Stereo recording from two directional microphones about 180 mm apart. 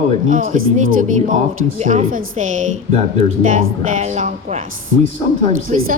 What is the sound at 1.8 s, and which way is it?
A woman's voice, 40° right (ahead or behind).